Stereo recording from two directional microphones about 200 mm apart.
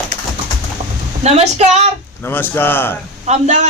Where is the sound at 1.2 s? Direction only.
35° right (ahead or behind).